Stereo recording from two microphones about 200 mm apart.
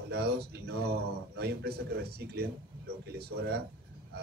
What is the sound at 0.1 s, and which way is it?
Speech, 55° right (ahead or behind).